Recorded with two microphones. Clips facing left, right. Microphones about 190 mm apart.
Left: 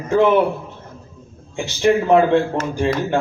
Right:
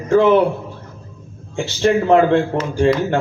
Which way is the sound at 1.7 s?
15° left (ahead or behind).